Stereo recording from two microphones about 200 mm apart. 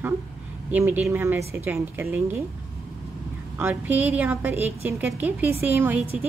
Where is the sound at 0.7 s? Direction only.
10° right (ahead or behind).